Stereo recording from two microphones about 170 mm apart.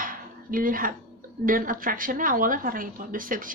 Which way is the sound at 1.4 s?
55° right (ahead or behind).